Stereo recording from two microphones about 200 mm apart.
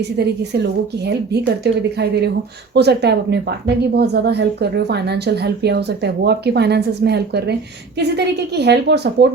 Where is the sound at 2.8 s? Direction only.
55° right (ahead or behind).